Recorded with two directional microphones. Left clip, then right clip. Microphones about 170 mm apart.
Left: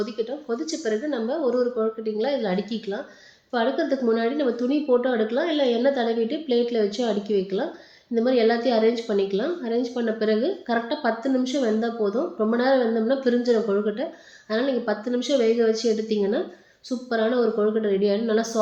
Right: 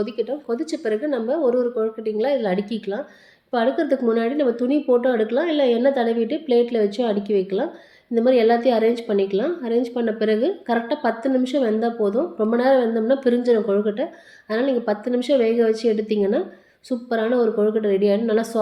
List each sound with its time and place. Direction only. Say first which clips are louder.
0.0 s a woman's voice: right 3 dB; 45° right (ahead or behind)